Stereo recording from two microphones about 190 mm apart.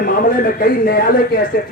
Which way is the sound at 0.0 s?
50° left (ahead or behind).